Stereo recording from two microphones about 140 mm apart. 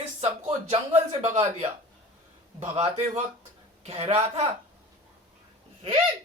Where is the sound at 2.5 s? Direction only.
45° right (ahead or behind).